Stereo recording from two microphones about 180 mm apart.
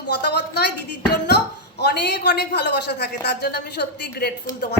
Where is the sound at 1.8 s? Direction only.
65° left (ahead or behind).